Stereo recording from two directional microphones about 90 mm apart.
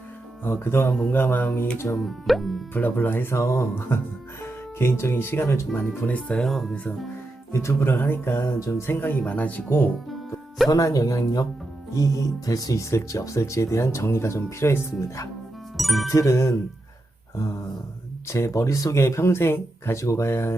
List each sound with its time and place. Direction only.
0.4 s speech: 25° left (ahead or behind)
2.0 s speech: centre (ahead or behind)
2.7 s speech: 20° left (ahead or behind)
6.5 s speech: centre (ahead or behind)
7.5 s speech: 30° left (ahead or behind)
9.0 s speech: 20° left (ahead or behind)
10.7 s speech: 40° left (ahead or behind)
15.8 s speech: centre (ahead or behind)
16.0 s speech: 35° left (ahead or behind)
18.3 s speech: 30° left (ahead or behind)